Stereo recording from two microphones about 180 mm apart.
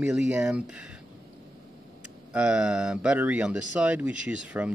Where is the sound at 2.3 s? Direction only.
5° right (ahead or behind).